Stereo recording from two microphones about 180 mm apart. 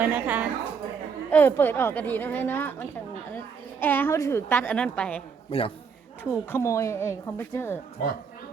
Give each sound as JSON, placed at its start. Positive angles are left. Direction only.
{"t": 0.0, "sound": "a woman's voice", "side_deg": -10}
{"t": 1.3, "sound": "a woman's voice", "side_deg": 10}
{"t": 5.5, "sound": "a man's voice", "side_deg": 30}
{"t": 6.3, "sound": "a woman's voice", "side_deg": 15}